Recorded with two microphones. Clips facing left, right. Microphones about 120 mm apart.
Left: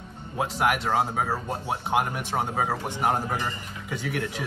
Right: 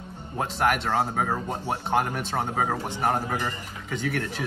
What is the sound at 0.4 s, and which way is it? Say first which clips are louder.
Speech: even; 10° left (ahead or behind).